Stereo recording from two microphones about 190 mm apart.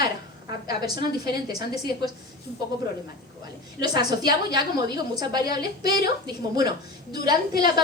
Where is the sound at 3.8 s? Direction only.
20° right (ahead or behind).